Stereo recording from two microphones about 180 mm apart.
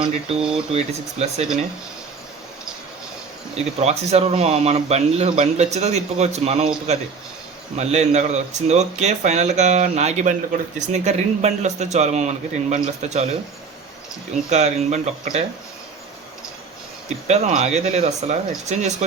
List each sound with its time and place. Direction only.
0.0 s speech: 35° right (ahead or behind)
0.3 s speech: 5° right (ahead or behind)
3.5 s speech: 35° right (ahead or behind)
14.5 s speech: 40° right (ahead or behind)
17.2 s speech: 40° right (ahead or behind)